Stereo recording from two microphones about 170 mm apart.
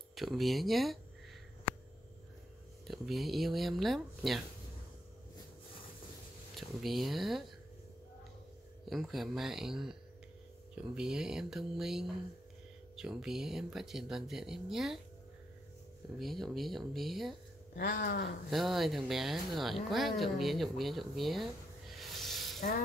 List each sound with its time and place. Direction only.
0.1 s speech: centre (ahead or behind)
2.9 s speech: centre (ahead or behind)
6.5 s speech: centre (ahead or behind)
8.8 s speech: centre (ahead or behind)
16.2 s speech: centre (ahead or behind)
17.7 s speech: 55° left (ahead or behind)
18.5 s speech: centre (ahead or behind)
21.9 s a sound: centre (ahead or behind)